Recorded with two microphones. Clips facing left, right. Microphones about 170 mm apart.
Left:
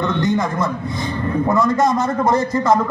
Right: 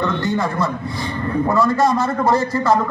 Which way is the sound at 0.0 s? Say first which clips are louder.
Left 1 dB; 20° left (ahead or behind).